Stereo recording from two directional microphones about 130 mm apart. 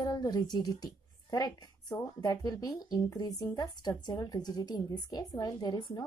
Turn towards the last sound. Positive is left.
turn(degrees=30)  # may be behind; listen again after turning